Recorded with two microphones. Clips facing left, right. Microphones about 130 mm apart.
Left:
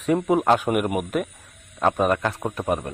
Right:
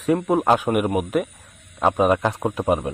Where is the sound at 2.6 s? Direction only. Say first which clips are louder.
Right 4 dB; 20° right (ahead or behind).